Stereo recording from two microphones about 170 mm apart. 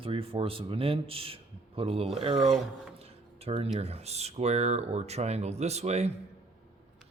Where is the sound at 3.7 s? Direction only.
40° right (ahead or behind).